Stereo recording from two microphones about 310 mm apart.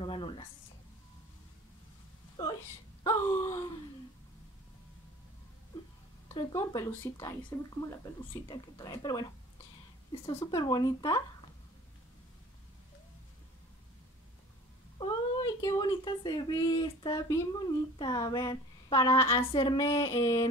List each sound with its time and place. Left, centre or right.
0.0 s a sound: centre
3.0 s wail: centre
6.2 s speech: centre
15.0 s speech: centre